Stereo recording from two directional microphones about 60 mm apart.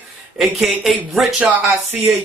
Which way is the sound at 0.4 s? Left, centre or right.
Centre.